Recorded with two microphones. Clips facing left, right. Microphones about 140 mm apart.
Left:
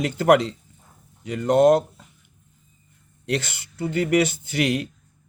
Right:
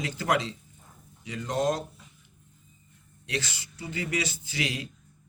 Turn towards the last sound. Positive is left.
turn(degrees=55)  # may be behind; listen again after turning